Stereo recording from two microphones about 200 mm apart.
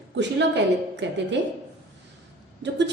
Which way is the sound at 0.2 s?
60° right (ahead or behind).